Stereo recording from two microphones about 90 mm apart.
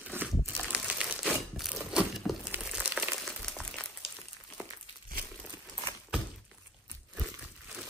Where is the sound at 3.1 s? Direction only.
5° left (ahead or behind).